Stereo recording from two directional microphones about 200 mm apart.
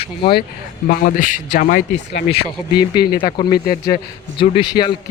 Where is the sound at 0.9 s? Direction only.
40° left (ahead or behind).